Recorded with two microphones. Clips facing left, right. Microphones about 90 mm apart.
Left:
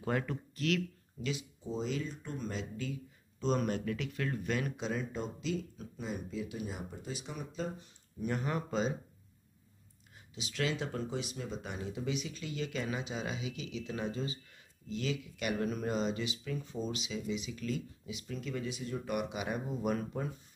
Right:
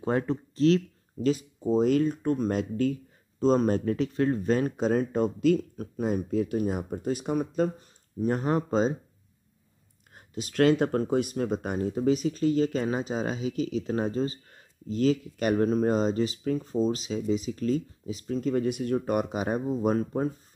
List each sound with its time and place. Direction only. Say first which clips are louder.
0.0 s speech: right 8 dB; 30° right (ahead or behind); by 7.9 s 50° right (ahead or behind)
8.2 s speech: right 9 dB; 40° right (ahead or behind)
10.1 s speech: right 13 dB; 50° right (ahead or behind)